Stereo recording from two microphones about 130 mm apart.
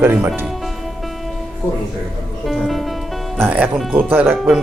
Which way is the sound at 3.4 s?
15° right (ahead or behind).